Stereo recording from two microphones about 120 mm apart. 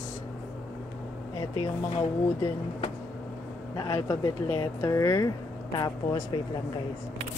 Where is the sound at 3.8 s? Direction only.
25° left (ahead or behind).